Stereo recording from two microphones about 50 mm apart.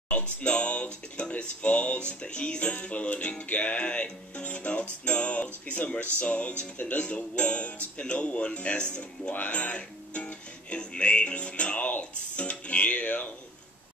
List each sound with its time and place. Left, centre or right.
0.1 s speech: left